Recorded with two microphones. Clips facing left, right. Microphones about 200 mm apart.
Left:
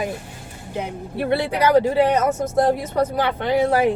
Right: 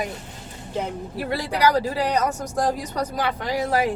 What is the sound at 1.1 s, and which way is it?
Speech, 25° left (ahead or behind).